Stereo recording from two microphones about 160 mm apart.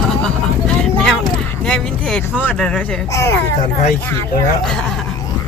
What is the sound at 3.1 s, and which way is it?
Speech, 15° left (ahead or behind).